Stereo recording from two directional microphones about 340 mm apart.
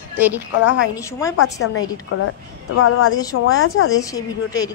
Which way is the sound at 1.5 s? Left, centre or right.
Left.